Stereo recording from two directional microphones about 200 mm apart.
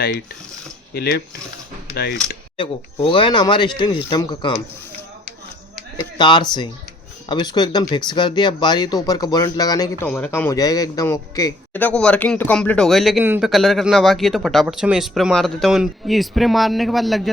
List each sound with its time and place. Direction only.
0.9 s speech: 50° left (ahead or behind)
2.6 s speech: 25° left (ahead or behind)
6.1 s speech: 20° left (ahead or behind)
10.1 s a man's voice: 5° left (ahead or behind)